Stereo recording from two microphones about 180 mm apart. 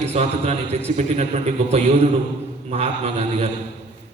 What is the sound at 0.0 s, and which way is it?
A man's voice, 35° right (ahead or behind).